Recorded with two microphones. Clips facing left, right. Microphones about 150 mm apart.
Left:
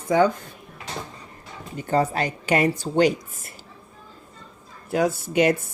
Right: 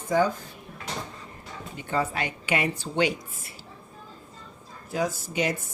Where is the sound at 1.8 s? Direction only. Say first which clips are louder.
Left 6 dB; 40° left (ahead or behind).